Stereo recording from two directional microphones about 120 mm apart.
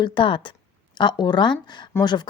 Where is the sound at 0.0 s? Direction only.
40° left (ahead or behind).